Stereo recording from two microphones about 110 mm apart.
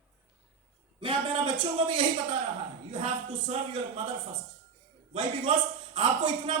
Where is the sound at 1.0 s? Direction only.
50° right (ahead or behind).